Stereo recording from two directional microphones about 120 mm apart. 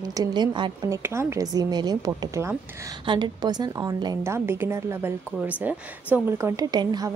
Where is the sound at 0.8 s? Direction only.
25° right (ahead or behind).